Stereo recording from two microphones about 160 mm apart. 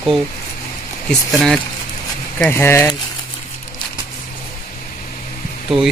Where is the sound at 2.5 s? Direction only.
15° left (ahead or behind).